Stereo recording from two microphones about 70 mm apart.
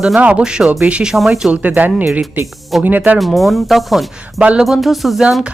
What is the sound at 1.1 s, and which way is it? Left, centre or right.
Speech, centre.